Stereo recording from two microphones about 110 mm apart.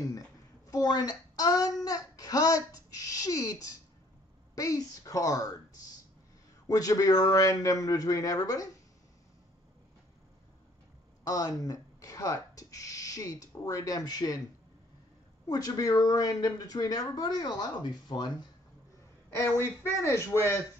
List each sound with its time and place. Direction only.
0.7 s a child's voice: 35° left (ahead or behind)
6.7 s a child's voice: 30° left (ahead or behind)
11.2 s speech: 30° left (ahead or behind)
15.4 s a child's voice: 35° left (ahead or behind)
19.4 s speech: 20° left (ahead or behind)